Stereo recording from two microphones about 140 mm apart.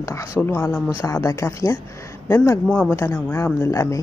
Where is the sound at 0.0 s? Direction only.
20° left (ahead or behind).